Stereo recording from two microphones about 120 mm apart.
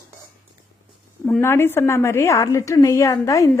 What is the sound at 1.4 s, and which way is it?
A woman's voice, 20° left (ahead or behind).